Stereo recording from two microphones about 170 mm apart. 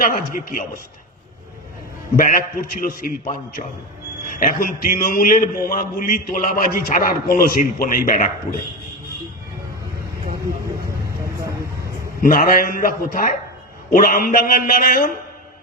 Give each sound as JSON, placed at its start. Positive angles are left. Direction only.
{"t": 0.0, "sound": "a man's voice", "side_deg": 55}
{"t": 2.1, "sound": "a man's voice", "side_deg": 55}
{"t": 12.2, "sound": "a man's voice", "side_deg": 55}